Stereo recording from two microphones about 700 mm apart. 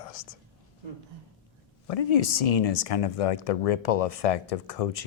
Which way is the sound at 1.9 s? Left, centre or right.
Left.